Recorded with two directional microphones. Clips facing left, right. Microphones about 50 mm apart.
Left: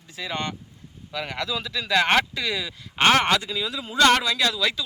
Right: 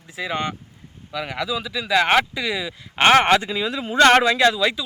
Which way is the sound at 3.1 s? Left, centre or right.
Right.